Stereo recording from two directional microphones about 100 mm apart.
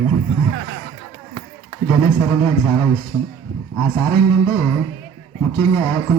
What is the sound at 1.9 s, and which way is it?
Speech, 35° left (ahead or behind).